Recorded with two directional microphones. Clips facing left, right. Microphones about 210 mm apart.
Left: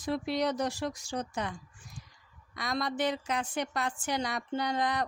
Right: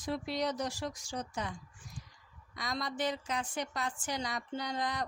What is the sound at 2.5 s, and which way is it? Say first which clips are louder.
A woman's voice: left 5 dB; 65° left (ahead or behind).